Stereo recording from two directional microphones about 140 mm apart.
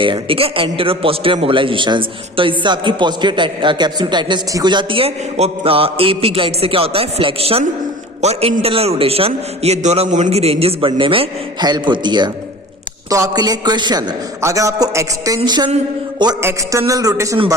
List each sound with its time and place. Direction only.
0.0 s a man's voice: 40° right (ahead or behind)
16.4 s a man's voice: 20° right (ahead or behind)